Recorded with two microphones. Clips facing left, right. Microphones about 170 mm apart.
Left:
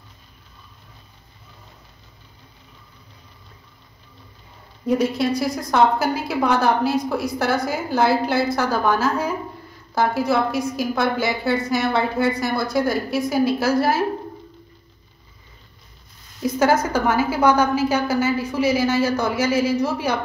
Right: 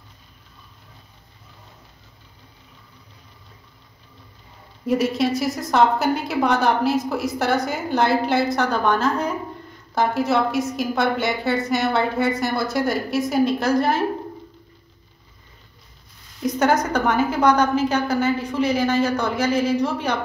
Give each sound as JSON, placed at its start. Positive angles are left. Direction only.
{"t": 4.8, "sound": "a woman's voice", "side_deg": 0}
{"t": 16.4, "sound": "a woman's voice", "side_deg": 5}